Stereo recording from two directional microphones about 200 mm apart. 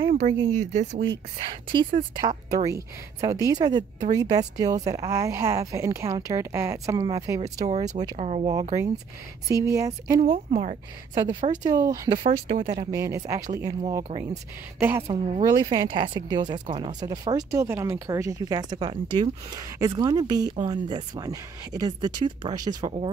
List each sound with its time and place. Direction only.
0.0 s speech: 30° right (ahead or behind)
1.1 s a woman's voice: 25° right (ahead or behind)
8.2 s speech: 30° right (ahead or behind)
9.5 s a woman's voice: 15° right (ahead or behind)
10.3 s speech: 35° right (ahead or behind)
11.1 s speech: 20° right (ahead or behind)
12.3 s speech: 30° right (ahead or behind)
12.9 s a woman's voice: 15° right (ahead or behind)
15.0 s speech: 30° right (ahead or behind)
15.4 s speech: 20° right (ahead or behind)